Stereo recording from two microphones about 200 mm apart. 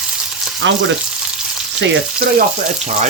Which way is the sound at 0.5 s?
70° right (ahead or behind).